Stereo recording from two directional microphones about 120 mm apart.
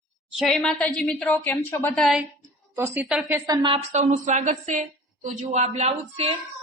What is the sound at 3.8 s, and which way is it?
A woman's voice, 75° right (ahead or behind).